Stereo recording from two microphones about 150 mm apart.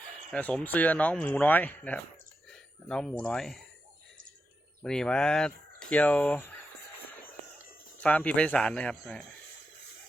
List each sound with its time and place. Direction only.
0.3 s speech: 10° left (ahead or behind)
4.8 s speech: 5° left (ahead or behind)
8.0 s speech: 10° left (ahead or behind)